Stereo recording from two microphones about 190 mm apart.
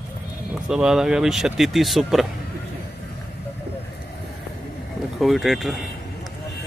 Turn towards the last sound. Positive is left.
turn(degrees=0)  # may be behind; listen again after turning